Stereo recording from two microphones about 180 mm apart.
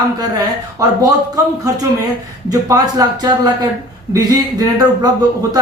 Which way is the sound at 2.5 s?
20° right (ahead or behind).